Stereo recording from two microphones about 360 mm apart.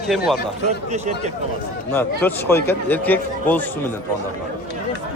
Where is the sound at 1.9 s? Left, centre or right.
Centre.